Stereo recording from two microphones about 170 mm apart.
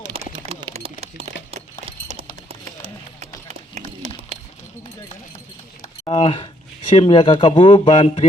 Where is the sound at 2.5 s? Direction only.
35° right (ahead or behind).